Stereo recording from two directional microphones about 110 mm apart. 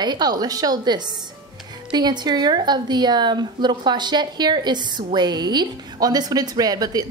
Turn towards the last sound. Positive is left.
turn(degrees=-35)  # may be behind; listen again after turning